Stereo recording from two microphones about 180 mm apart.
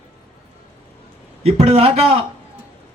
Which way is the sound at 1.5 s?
35° right (ahead or behind).